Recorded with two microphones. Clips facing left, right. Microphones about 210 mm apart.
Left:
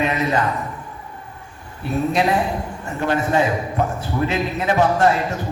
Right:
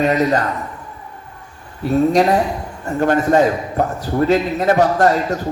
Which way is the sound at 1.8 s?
40° right (ahead or behind).